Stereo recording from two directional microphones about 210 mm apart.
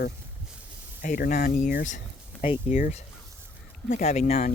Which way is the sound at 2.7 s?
40° left (ahead or behind).